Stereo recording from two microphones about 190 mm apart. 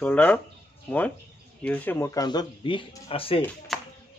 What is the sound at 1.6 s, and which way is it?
A man's voice, 5° left (ahead or behind).